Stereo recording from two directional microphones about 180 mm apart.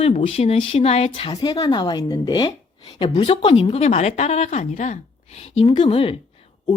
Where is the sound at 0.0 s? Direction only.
35° left (ahead or behind).